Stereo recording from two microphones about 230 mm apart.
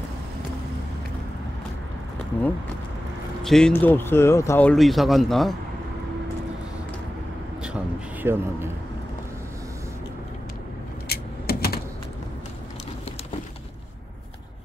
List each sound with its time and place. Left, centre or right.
3.4 s speech: centre
7.6 s a sound: centre
11.1 s vehicle: left